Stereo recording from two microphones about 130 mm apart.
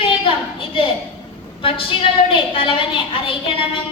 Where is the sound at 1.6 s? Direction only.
45° left (ahead or behind).